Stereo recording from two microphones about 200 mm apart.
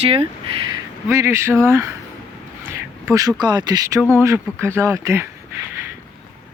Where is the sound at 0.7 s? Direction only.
15° right (ahead or behind).